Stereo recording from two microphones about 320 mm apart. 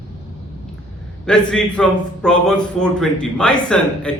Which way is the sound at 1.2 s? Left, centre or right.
Centre.